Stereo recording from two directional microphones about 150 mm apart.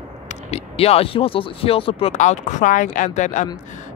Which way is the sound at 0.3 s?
45° left (ahead or behind).